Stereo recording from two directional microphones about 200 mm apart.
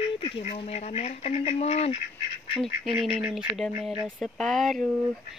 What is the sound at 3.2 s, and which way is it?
Speech, centre (ahead or behind).